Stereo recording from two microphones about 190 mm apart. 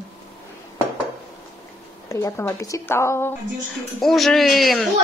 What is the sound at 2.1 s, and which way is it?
A woman's voice, 15° left (ahead or behind).